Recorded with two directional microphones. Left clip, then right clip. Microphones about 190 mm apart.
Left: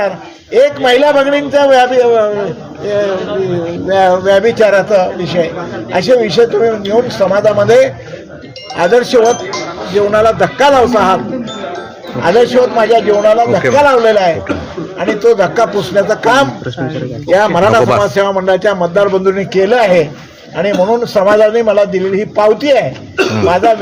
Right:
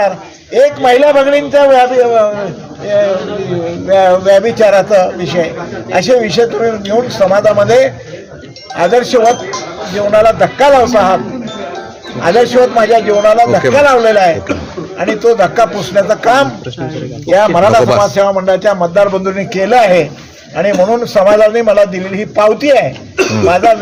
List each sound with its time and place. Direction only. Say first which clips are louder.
0.5 s speech: right 1 dB; 5° right (ahead or behind)
3.8 s speech: right 2 dB; centre (ahead or behind)
12.2 s a man's voice: right 1 dB; 5° right (ahead or behind)